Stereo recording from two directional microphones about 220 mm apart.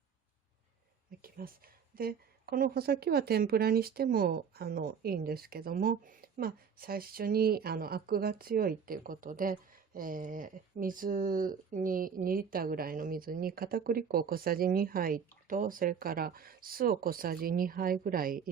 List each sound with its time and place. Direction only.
1.2 s speech: 40° right (ahead or behind)